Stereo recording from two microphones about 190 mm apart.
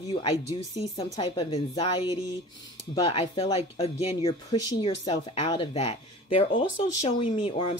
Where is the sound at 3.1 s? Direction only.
30° left (ahead or behind).